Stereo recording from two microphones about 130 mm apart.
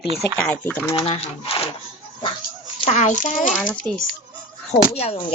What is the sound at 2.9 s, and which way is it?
Speech, 65° left (ahead or behind).